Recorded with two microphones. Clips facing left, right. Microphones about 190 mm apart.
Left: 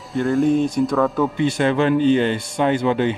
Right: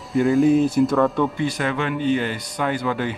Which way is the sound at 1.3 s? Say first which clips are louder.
Left 5 dB; 25° left (ahead or behind).